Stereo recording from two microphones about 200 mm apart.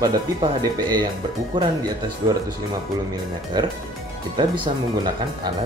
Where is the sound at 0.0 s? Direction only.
20° right (ahead or behind).